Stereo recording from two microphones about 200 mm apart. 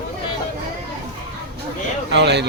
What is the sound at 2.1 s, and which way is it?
Speech, 60° right (ahead or behind).